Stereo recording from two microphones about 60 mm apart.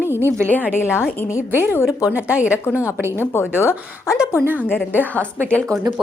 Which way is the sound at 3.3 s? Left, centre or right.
Left.